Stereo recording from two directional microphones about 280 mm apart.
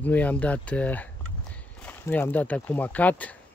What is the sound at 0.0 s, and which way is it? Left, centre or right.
Speech, centre.